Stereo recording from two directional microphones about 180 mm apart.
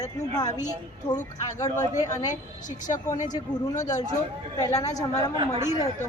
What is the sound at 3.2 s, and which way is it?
Speech, 20° left (ahead or behind).